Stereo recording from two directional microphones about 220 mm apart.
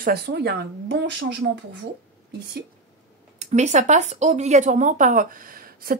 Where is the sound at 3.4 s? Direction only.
30° right (ahead or behind).